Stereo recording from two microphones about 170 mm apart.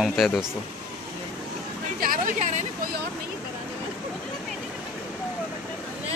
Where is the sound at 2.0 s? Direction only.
55° right (ahead or behind).